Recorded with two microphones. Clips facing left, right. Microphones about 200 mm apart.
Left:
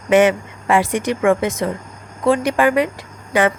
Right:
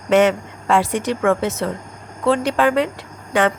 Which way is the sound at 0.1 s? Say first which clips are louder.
Left 1 dB; 10° left (ahead or behind).